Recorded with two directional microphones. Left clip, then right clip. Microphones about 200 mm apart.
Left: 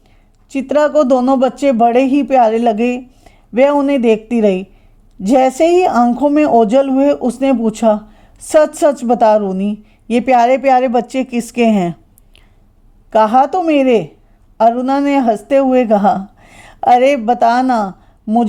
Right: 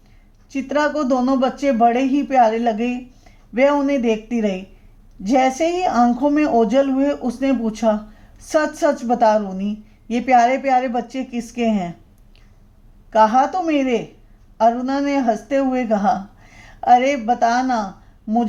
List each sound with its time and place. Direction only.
0.5 s speech: 35° left (ahead or behind)
13.1 s speech: 40° left (ahead or behind)